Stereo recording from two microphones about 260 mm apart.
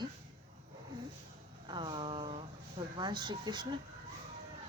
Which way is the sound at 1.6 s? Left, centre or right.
Centre.